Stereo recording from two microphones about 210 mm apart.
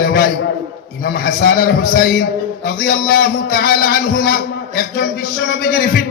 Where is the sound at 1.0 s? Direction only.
45° left (ahead or behind).